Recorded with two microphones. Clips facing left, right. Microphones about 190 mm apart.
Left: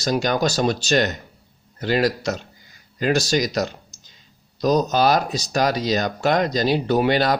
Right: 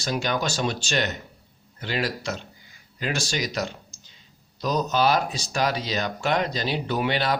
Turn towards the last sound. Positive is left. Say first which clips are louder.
# left 6 dB
turn(degrees=40)  # may be behind; listen again after turning